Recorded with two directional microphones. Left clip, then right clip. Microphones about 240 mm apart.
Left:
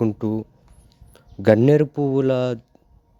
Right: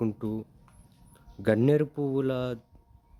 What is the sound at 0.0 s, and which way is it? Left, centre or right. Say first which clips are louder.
Speech: left 9 dB; left.